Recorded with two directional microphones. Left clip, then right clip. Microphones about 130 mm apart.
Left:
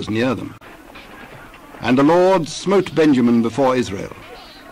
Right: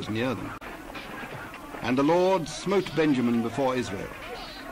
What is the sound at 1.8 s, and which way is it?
Speech, 40° left (ahead or behind).